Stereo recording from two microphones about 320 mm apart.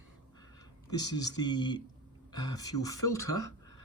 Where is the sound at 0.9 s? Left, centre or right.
Centre.